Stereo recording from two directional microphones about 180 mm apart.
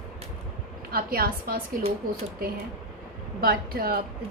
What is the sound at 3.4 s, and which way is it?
Speech, 55° right (ahead or behind).